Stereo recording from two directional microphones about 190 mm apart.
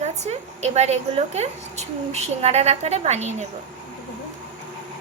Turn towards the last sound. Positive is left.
turn(degrees=-35)  # may be behind; listen again after turning